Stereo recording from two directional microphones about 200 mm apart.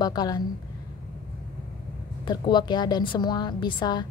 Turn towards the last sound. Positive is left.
turn(degrees=20)  # may be behind; listen again after turning